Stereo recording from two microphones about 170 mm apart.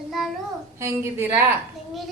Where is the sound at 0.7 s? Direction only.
15° right (ahead or behind).